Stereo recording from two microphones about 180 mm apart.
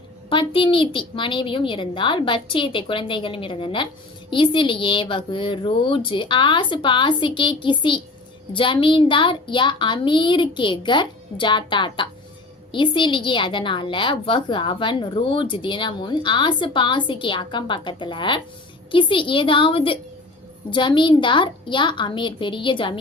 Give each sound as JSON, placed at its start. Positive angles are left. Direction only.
{"t": 0.3, "sound": "a woman's voice", "side_deg": 30}